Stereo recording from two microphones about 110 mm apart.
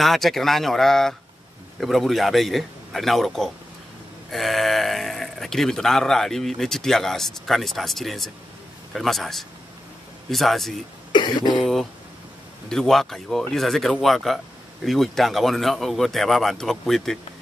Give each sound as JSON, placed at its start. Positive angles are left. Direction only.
{"t": 0.0, "sound": "speech", "side_deg": 0}
{"t": 11.1, "sound": "speech", "side_deg": 40}
{"t": 11.5, "sound": "speech", "side_deg": 0}